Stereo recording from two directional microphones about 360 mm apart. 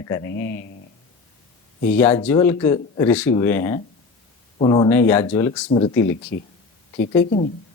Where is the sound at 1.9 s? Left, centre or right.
Centre.